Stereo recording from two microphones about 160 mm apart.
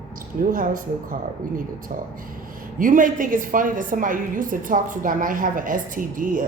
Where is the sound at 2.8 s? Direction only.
55° right (ahead or behind).